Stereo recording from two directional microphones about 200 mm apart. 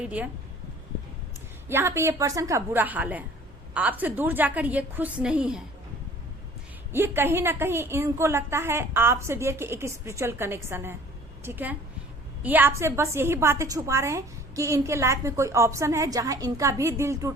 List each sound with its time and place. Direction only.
0.0 s a woman's voice: 5° right (ahead or behind)
1.6 s a woman's voice: 10° right (ahead or behind)
6.9 s a woman's voice: 10° right (ahead or behind)